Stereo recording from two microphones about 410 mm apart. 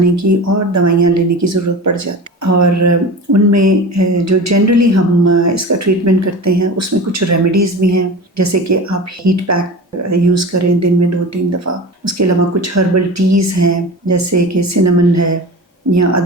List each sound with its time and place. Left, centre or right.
0.0 s speech: right